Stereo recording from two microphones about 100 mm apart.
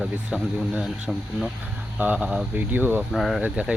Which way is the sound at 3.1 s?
Centre (ahead or behind).